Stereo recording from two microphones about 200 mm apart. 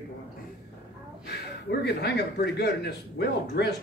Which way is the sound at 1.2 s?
55° left (ahead or behind).